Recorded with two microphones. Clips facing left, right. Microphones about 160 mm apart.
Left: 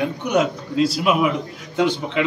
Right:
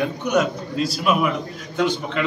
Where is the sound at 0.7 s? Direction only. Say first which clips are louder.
Left 9 dB; 70° left (ahead or behind).